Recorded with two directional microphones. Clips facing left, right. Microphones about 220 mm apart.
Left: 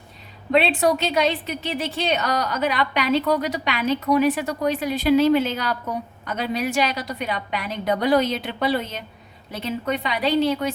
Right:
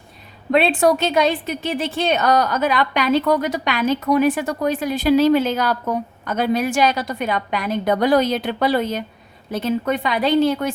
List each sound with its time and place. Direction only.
0.6 s a woman's voice: 50° right (ahead or behind)